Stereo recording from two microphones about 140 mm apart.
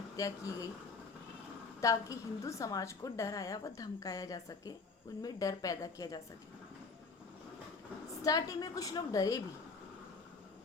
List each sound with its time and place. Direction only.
0.2 s a woman's voice: 25° left (ahead or behind)
1.8 s a woman's voice: 25° left (ahead or behind)
8.2 s a woman's voice: 25° left (ahead or behind)